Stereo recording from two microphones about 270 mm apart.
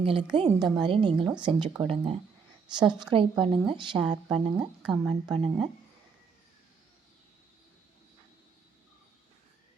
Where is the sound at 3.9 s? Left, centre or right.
Centre.